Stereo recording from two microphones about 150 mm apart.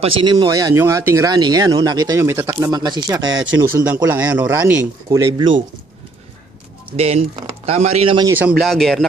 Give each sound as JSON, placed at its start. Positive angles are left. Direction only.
{"t": 0.0, "sound": "speech", "side_deg": -30}
{"t": 4.0, "sound": "speech", "side_deg": -15}
{"t": 5.1, "sound": "speech", "side_deg": -20}
{"t": 6.9, "sound": "speech", "side_deg": -45}
{"t": 8.3, "sound": "speech", "side_deg": -10}
{"t": 8.5, "sound": "speech", "side_deg": 0}